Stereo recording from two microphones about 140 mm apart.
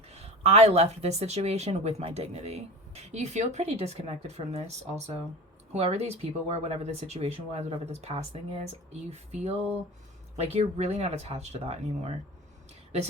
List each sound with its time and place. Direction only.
0.1 s speech: 50° right (ahead or behind)